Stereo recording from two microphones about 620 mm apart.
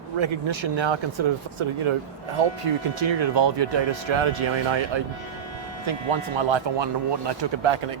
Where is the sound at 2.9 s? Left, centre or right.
Right.